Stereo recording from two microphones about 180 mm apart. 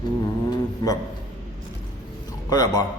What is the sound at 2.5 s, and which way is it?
Speech, 20° left (ahead or behind).